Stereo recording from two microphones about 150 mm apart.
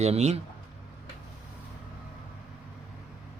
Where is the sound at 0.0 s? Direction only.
45° right (ahead or behind).